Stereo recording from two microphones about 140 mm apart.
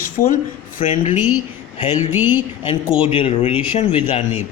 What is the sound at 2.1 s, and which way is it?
Speech, 10° right (ahead or behind).